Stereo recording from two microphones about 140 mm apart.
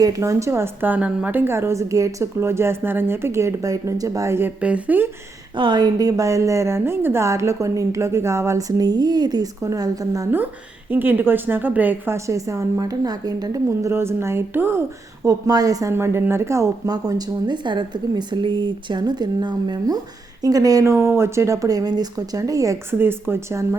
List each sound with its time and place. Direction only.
0.0 s a woman's voice: 25° right (ahead or behind)
5.5 s a woman's voice: 35° right (ahead or behind)
10.4 s a woman's voice: 15° right (ahead or behind)